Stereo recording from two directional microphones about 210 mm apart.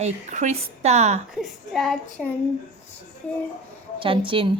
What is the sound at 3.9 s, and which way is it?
Speech, 25° right (ahead or behind).